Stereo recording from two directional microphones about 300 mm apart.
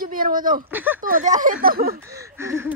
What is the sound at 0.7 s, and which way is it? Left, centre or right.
Speech, centre.